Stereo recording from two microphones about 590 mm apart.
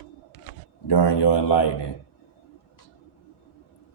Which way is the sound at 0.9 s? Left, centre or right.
Left.